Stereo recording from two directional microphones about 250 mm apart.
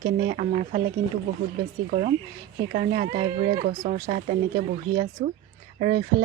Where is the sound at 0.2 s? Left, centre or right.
Right.